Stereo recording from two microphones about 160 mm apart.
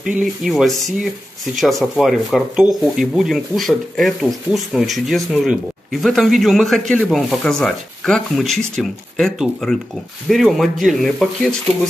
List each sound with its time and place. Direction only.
0.0 s speech: 5° right (ahead or behind)